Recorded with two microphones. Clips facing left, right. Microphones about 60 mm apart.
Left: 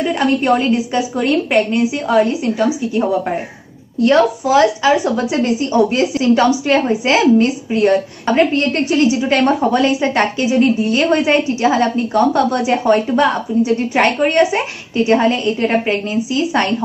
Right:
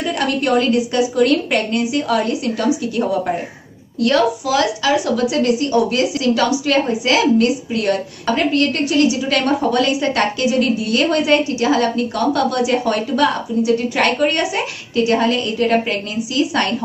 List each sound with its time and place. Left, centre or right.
0.0 s a woman's voice: left
4.0 s a woman's voice: left